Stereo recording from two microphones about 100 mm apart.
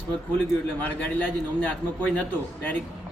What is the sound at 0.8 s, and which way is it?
Speech, 15° left (ahead or behind).